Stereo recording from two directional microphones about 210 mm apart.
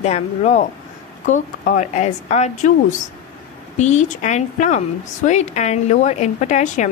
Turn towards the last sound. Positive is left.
turn(degrees=35)  # may be behind; listen again after turning